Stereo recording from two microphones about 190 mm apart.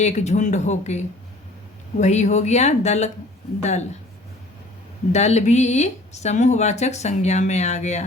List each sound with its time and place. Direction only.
0.0 s speech: 35° left (ahead or behind)
5.1 s speech: 35° left (ahead or behind)